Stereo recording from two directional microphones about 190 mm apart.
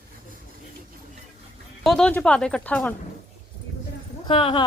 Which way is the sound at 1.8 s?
5° left (ahead or behind).